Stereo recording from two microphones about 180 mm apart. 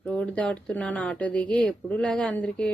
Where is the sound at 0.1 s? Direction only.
5° left (ahead or behind).